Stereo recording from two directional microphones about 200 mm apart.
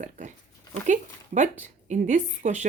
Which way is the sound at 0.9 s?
35° right (ahead or behind).